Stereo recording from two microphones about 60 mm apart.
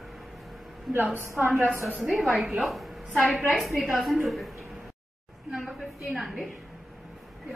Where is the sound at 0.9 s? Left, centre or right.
Right.